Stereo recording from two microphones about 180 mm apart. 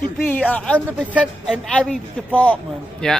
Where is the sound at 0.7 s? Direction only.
5° right (ahead or behind).